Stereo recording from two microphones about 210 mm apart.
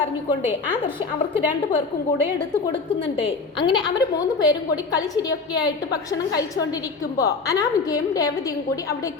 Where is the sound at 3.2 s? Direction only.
20° left (ahead or behind).